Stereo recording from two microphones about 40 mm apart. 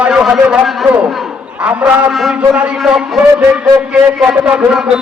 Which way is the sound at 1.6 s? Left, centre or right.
Right.